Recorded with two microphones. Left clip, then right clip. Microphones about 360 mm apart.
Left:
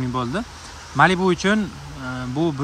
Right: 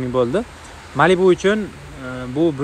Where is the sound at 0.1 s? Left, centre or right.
Centre.